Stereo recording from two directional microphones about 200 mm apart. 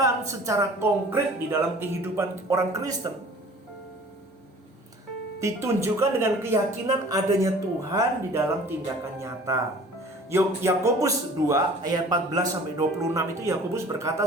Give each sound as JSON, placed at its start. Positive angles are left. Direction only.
{"t": 0.0, "sound": "speech", "side_deg": -15}
{"t": 5.4, "sound": "speech", "side_deg": -15}